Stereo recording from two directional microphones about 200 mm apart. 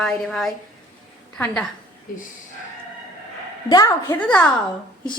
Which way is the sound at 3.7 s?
20° left (ahead or behind).